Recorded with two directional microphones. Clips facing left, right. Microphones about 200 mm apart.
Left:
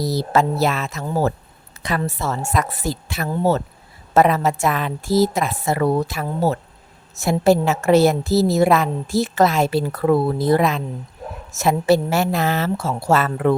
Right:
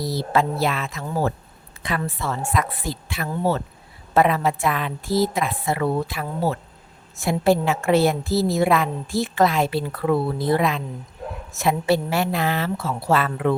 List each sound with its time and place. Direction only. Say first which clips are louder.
0.0 s a woman's voice: left 3 dB; 40° left (ahead or behind)